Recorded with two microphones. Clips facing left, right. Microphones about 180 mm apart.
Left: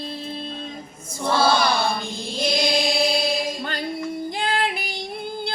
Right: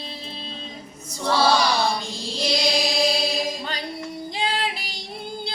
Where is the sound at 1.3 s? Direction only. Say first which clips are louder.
Even; 55° left (ahead or behind).